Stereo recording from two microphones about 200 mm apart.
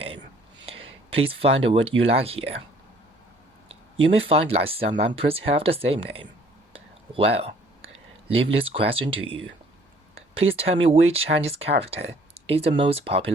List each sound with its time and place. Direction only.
1.2 s speech: 30° right (ahead or behind)
3.9 s speech: 30° right (ahead or behind)
7.1 s speech: 30° right (ahead or behind)
10.6 s speech: 30° right (ahead or behind)